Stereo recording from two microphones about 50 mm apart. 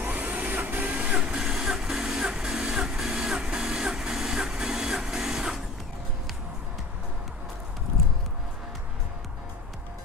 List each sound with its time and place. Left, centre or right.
0.0 s printer: right
1.4 s music: centre